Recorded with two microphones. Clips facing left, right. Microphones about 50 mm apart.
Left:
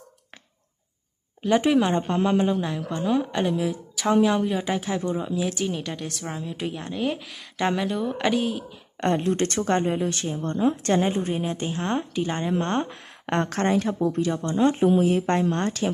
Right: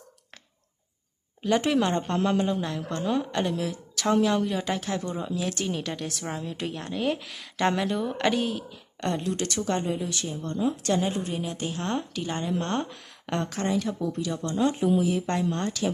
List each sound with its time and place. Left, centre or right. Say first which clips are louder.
1.5 s a woman's voice: left 3 dB; centre
9.0 s speech: left 6 dB; left